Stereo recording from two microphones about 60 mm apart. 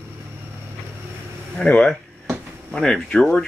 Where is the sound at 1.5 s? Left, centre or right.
Centre.